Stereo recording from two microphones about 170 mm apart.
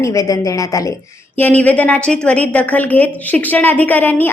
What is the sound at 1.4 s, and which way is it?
A woman's voice, 10° left (ahead or behind).